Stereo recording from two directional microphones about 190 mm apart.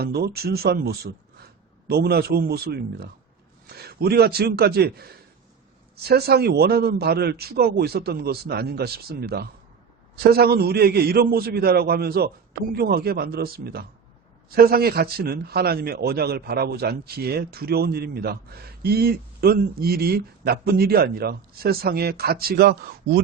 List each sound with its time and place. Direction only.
0.0 s a man's voice: 55° right (ahead or behind)